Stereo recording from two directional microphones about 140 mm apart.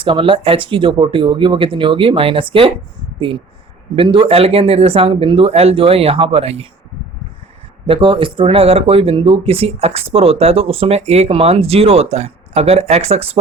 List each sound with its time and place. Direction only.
0.0 s speech: 40° right (ahead or behind)
3.9 s speech: 40° right (ahead or behind)
7.9 s speech: 40° right (ahead or behind)